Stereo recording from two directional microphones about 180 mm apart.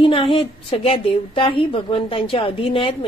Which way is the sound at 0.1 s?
30° left (ahead or behind).